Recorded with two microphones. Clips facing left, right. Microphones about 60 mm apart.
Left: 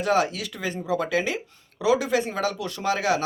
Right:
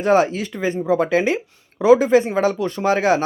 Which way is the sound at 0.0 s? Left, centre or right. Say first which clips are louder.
Right 6 dB; right.